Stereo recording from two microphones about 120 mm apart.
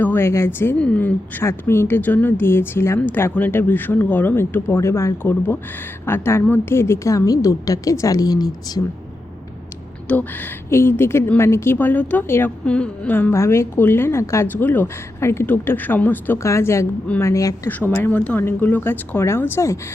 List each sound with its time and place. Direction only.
0.0 s a woman's voice: 20° left (ahead or behind)
10.1 s a woman's voice: 15° left (ahead or behind)
17.7 s a woman's voice: 15° left (ahead or behind)